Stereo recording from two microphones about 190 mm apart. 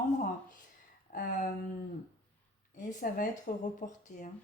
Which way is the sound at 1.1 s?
45° left (ahead or behind).